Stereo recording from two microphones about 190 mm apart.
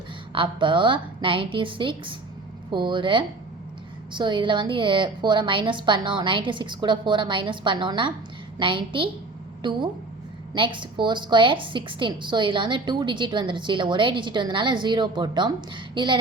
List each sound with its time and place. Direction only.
0.3 s a woman's voice: 25° right (ahead or behind)